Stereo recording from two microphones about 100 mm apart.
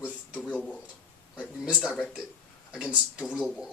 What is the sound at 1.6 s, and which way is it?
Speech, 5° right (ahead or behind).